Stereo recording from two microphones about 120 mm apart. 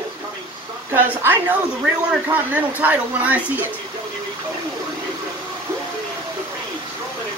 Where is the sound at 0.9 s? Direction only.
20° right (ahead or behind).